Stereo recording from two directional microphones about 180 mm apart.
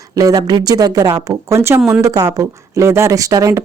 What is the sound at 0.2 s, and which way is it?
Speech, 20° right (ahead or behind).